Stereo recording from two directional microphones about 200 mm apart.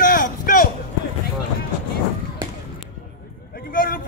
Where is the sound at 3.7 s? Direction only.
45° left (ahead or behind).